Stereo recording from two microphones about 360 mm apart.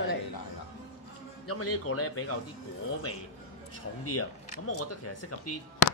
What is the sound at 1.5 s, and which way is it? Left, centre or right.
Speech, left.